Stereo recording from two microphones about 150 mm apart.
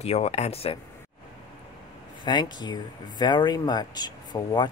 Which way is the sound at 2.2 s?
30° left (ahead or behind).